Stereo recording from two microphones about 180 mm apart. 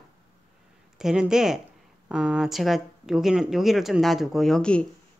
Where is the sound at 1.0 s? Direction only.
5° right (ahead or behind).